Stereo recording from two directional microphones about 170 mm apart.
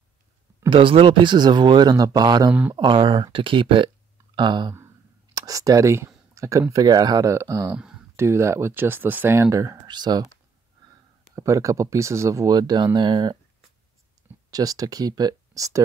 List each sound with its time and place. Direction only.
0.7 s speech: 30° right (ahead or behind)
7.7 s speech: 5° right (ahead or behind)
8.2 s speech: 15° right (ahead or behind)
11.3 s speech: 20° right (ahead or behind)
14.5 s speech: 20° right (ahead or behind)